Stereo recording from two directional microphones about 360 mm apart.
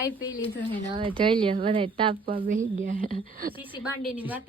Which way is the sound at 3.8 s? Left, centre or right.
Centre.